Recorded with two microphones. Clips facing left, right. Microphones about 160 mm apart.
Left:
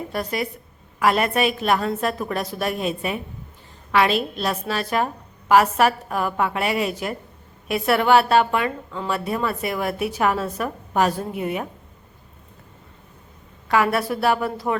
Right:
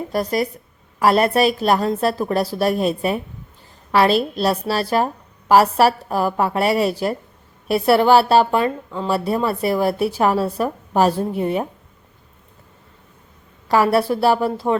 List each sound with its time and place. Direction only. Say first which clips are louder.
0.1 s a woman's voice: right 7 dB; 40° right (ahead or behind)
13.7 s a woman's voice: right 4 dB; 35° right (ahead or behind)